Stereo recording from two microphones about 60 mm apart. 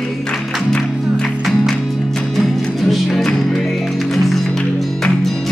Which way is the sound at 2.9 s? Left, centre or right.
Centre.